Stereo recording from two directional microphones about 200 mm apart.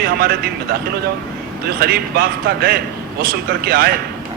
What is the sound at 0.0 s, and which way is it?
Speech, 50° right (ahead or behind).